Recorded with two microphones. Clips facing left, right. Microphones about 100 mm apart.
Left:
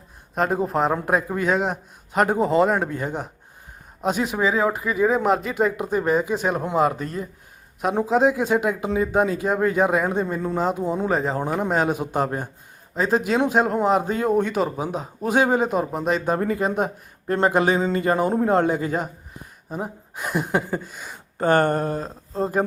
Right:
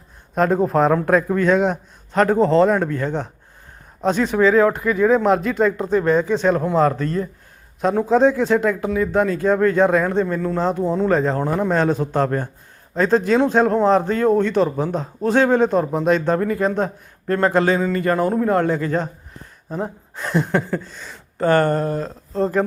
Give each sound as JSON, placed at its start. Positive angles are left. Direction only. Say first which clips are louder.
{"t": 0.3, "sound": "speech", "louder": "right 5 dB", "side_deg": 5}
{"t": 11.4, "sound": "speech", "louder": "right 3 dB", "side_deg": 15}
{"t": 16.4, "sound": "speech", "louder": "right 3 dB", "side_deg": 25}
{"t": 22.3, "sound": "speech", "louder": "right 3 dB", "side_deg": 10}